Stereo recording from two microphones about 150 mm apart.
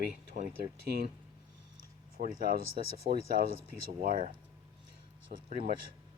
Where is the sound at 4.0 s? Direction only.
60° right (ahead or behind).